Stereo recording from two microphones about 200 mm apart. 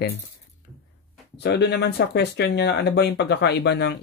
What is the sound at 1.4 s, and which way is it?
Speech, 60° left (ahead or behind).